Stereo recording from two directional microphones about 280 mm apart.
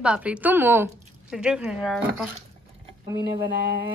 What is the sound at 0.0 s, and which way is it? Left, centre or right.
A woman's voice, centre.